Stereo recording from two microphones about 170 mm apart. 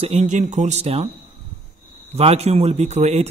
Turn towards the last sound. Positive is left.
turn(degrees=-40)  # may be behind; listen again after turning